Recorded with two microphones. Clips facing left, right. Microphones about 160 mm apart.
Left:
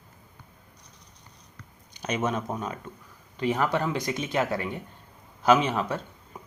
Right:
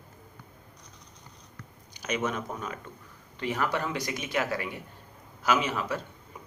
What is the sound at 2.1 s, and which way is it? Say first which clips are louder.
Speech: left 3 dB; 25° left (ahead or behind).